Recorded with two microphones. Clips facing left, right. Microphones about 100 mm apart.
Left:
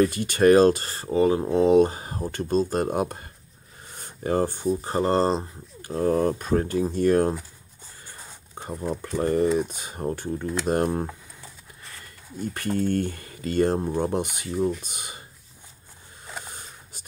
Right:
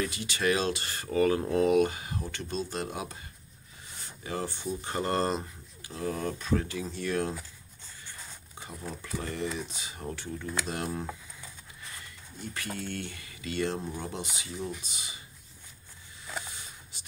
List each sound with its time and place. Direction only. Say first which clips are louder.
0.0 s speech: left 11 dB; 50° left (ahead or behind); by 5.5 s 30° left (ahead or behind)
5.8 s speech: left 11 dB; 45° left (ahead or behind)
8.5 s speech: left 11 dB; 50° left (ahead or behind)
12.7 s speech: left 13 dB; 45° left (ahead or behind)
16.4 s a sound: left 4 dB; 45° left (ahead or behind)